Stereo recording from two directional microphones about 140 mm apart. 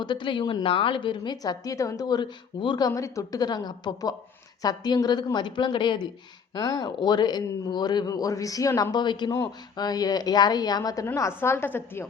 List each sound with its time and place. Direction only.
0.0 s a woman's voice: 35° left (ahead or behind); by 12.0 s 15° left (ahead or behind)